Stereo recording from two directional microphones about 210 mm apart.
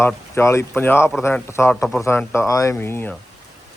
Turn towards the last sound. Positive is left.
turn(degrees=10)  # may be behind; listen again after turning